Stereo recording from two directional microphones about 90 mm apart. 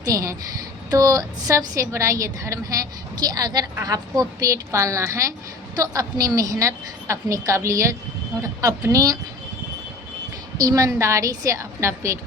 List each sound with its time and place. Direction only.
0.0 s a woman's voice: 40° right (ahead or behind)
10.6 s a woman's voice: 40° right (ahead or behind)